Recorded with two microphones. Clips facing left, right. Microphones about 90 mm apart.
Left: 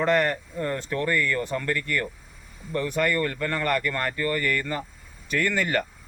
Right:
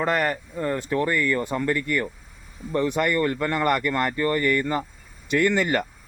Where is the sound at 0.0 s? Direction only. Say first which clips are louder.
Left 1 dB; 5° right (ahead or behind).